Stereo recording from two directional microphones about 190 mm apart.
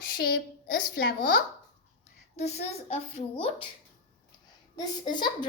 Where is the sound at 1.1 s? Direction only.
45° left (ahead or behind).